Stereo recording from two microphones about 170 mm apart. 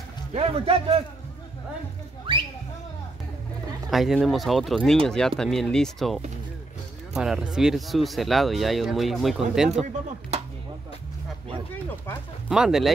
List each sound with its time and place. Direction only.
0.3 s a man's voice: 35° right (ahead or behind)
2.3 s a sound: 30° right (ahead or behind)
3.9 s speech: centre (ahead or behind)
12.4 s speech: 5° right (ahead or behind)